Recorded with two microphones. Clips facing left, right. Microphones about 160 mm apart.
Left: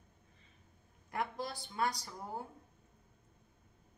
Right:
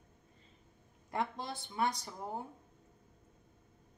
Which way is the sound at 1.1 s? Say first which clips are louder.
Right 1 dB; 25° right (ahead or behind).